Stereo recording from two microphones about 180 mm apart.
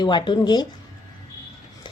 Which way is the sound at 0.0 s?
25° left (ahead or behind).